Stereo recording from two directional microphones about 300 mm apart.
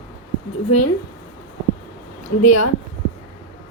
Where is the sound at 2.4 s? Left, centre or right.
Left.